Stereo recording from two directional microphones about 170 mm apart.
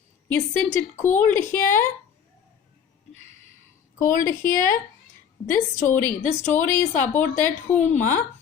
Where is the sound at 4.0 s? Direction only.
50° left (ahead or behind).